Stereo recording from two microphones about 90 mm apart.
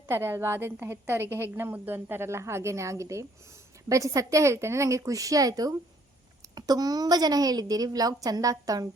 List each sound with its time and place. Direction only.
0.1 s a woman's voice: 25° right (ahead or behind)